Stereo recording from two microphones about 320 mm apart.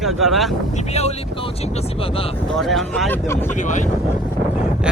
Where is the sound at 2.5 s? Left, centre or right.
Centre.